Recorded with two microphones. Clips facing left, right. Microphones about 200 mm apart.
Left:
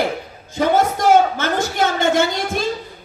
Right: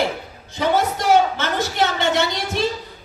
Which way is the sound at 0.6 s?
50° left (ahead or behind).